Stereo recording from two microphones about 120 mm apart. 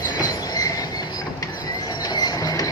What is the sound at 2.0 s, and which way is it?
Train, 35° left (ahead or behind).